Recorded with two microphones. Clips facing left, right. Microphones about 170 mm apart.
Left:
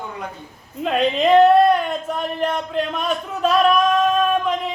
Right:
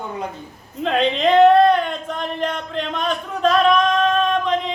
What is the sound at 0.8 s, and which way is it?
Speech, 5° left (ahead or behind).